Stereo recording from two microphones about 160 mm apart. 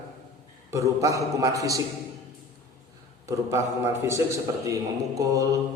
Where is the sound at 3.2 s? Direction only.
15° right (ahead or behind).